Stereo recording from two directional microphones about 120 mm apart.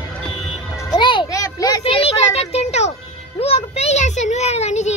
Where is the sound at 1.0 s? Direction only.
40° left (ahead or behind).